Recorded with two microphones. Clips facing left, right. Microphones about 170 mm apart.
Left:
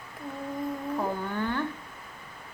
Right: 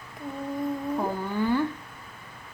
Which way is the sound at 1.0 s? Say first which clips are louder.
Right 1 dB; 10° right (ahead or behind).